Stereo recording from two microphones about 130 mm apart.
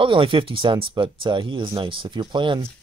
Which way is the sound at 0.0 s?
40° right (ahead or behind).